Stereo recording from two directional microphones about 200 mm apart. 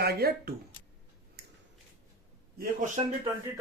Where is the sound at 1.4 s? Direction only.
55° right (ahead or behind).